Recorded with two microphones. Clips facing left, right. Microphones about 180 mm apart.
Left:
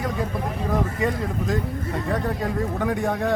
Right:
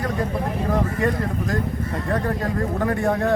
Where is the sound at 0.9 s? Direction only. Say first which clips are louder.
Right 2 dB; centre (ahead or behind).